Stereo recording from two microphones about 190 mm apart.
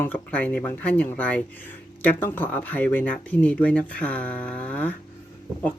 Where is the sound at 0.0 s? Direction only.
10° left (ahead or behind).